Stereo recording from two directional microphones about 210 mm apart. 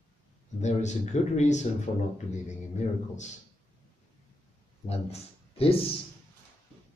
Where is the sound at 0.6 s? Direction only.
35° left (ahead or behind).